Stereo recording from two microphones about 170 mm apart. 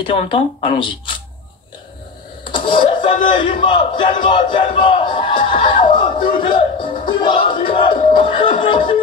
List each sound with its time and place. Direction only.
0.0 s speech: 35° left (ahead or behind)
2.4 s a sound: 30° left (ahead or behind)
3.6 s speech: 30° left (ahead or behind)